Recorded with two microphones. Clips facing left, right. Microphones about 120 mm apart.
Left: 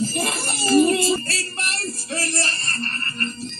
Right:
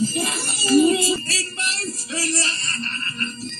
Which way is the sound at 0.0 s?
55° left (ahead or behind).